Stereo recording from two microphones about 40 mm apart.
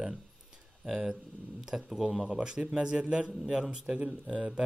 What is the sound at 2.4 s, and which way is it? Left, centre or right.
Speech, right.